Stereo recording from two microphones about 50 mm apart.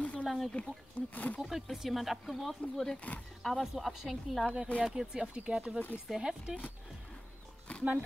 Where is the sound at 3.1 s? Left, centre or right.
Left.